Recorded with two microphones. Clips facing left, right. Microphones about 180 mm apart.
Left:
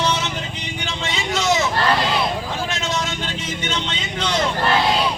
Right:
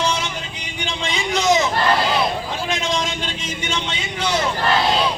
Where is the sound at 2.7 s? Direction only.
15° right (ahead or behind).